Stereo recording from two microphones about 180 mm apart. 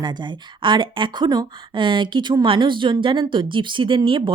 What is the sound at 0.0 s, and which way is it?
Speech, 25° right (ahead or behind).